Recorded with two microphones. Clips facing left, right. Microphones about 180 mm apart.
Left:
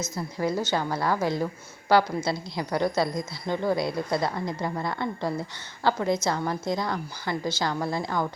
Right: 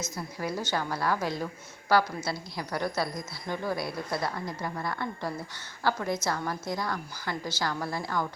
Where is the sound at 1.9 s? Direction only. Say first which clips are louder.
Left 4 dB; 25° left (ahead or behind).